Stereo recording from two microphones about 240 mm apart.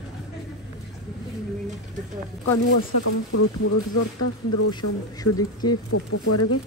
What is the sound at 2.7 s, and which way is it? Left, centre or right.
Speech, left.